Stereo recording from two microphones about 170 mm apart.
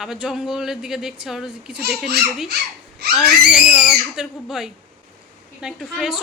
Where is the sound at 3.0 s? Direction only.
70° right (ahead or behind).